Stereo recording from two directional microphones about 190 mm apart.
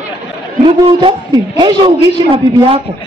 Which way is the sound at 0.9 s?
30° right (ahead or behind).